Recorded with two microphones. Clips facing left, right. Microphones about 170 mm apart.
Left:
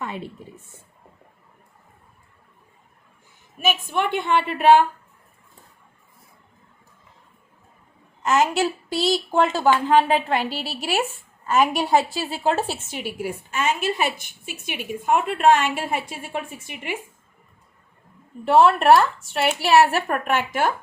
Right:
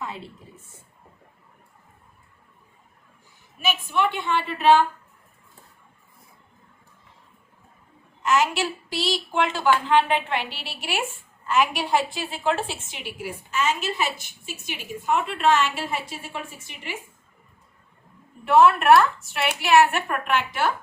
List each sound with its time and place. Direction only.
0.0 s a woman's voice: 65° left (ahead or behind)
3.6 s a woman's voice: 50° left (ahead or behind)
9.0 s a woman's voice: 40° left (ahead or behind)
18.4 s a woman's voice: 30° left (ahead or behind); by 20.7 s 45° left (ahead or behind)